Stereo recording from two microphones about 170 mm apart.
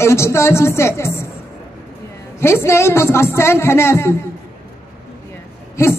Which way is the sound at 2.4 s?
15° left (ahead or behind).